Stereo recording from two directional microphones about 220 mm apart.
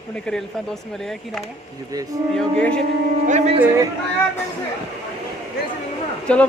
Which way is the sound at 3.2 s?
30° right (ahead or behind).